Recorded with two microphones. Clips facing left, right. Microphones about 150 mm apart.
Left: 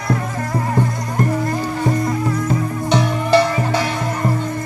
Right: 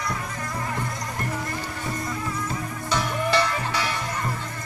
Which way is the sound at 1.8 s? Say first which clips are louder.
Left 11 dB; 50° left (ahead or behind).